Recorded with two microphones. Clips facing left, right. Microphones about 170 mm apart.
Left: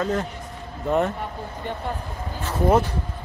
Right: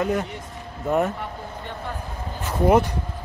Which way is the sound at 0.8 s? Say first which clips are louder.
Even; 5° right (ahead or behind).